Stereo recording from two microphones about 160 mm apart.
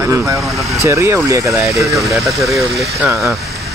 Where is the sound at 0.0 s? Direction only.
20° right (ahead or behind).